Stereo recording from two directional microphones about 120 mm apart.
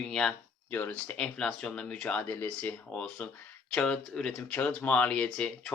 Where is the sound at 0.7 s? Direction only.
15° left (ahead or behind).